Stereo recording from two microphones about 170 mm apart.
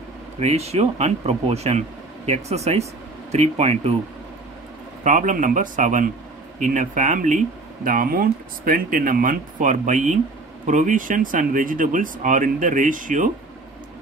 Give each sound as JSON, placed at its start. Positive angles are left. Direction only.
{"t": 0.4, "sound": "speech", "side_deg": -40}
{"t": 5.0, "sound": "speech", "side_deg": -50}